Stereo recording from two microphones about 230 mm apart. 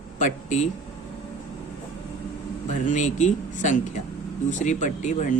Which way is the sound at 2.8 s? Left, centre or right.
Left.